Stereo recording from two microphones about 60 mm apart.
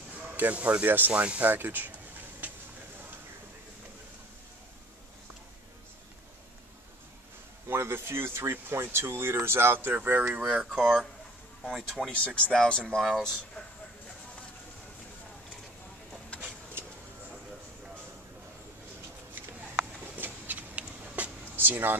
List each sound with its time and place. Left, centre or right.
0.4 s speech: right
2.4 s a sound: right
7.6 s speech: right
10.4 s speech: centre
11.7 s speech: centre
12.1 s speech: centre
20.0 s a sound: right